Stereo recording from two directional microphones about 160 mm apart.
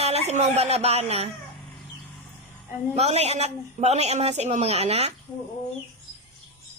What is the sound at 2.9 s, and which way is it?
A man's voice, 40° right (ahead or behind).